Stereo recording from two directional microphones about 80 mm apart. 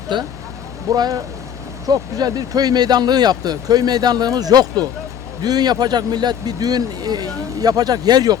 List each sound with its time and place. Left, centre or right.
0.1 s speech: right
0.9 s speech: right